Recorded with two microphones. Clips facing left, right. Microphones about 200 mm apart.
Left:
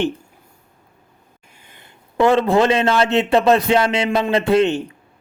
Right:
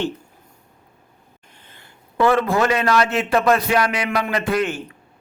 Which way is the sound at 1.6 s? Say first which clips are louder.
Left 2 dB; 20° left (ahead or behind).